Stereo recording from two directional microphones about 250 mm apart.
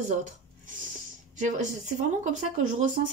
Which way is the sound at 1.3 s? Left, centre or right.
Right.